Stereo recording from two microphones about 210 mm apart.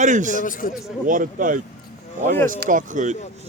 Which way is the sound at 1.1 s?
40° right (ahead or behind).